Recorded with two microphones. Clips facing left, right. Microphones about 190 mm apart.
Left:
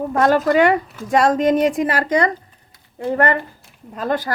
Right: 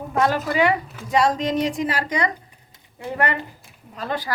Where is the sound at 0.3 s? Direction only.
45° left (ahead or behind).